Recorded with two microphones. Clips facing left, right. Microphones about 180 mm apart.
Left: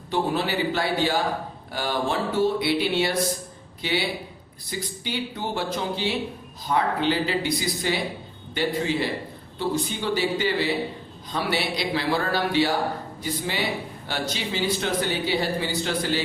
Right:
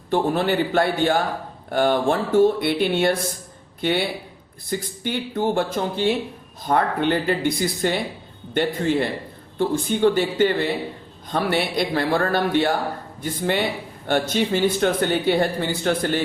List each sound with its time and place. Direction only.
0.1 s speech: 55° right (ahead or behind)